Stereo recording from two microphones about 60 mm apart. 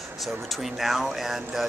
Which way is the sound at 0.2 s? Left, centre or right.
Centre.